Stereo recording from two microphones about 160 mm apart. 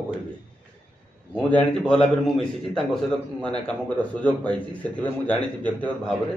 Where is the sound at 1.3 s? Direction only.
5° left (ahead or behind).